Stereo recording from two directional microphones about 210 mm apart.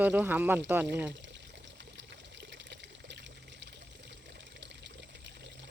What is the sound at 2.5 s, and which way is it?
Water, 55° right (ahead or behind).